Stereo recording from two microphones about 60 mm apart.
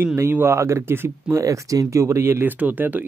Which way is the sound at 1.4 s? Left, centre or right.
Right.